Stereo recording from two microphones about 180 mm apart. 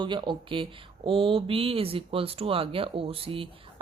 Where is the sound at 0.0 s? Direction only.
25° right (ahead or behind).